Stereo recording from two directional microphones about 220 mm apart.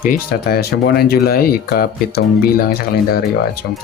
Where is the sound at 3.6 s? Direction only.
45° left (ahead or behind).